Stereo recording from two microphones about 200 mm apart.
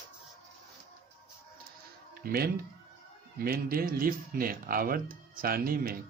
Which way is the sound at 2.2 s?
50° right (ahead or behind).